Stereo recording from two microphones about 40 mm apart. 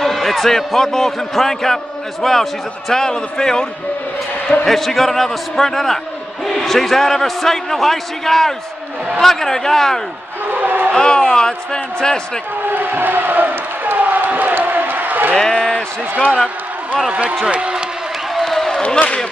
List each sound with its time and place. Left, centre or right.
0.0 s a man's voice: centre
4.6 s a man's voice: centre
10.5 s music: right
11.0 s a man's voice: centre
12.7 s a sound: right
15.3 s basketball bounce: centre
17.1 s a man's voice: right
18.4 s a sound: centre